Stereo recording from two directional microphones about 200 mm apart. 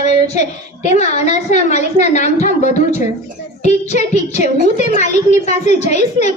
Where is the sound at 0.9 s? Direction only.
35° left (ahead or behind).